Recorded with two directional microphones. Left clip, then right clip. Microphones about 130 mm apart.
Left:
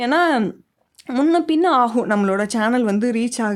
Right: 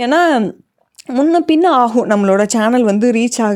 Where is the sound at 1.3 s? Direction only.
45° right (ahead or behind).